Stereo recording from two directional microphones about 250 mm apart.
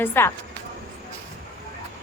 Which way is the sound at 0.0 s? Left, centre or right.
Centre.